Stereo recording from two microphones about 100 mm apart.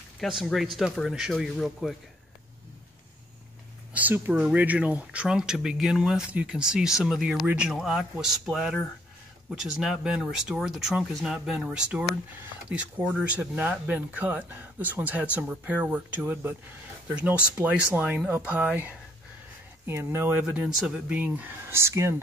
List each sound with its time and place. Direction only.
0.2 s speech: centre (ahead or behind)
3.9 s speech: 15° right (ahead or behind)
19.9 s speech: 25° right (ahead or behind)
20.4 s speech: 5° right (ahead or behind)
21.2 s speech: 20° right (ahead or behind)